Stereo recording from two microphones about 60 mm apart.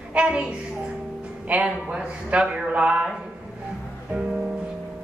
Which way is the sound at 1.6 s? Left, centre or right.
Centre.